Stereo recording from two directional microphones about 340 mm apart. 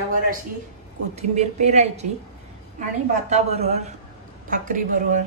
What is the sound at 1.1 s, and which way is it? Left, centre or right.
Speech, centre.